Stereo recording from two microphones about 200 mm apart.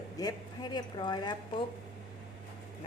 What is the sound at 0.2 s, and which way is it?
Speech, 20° left (ahead or behind).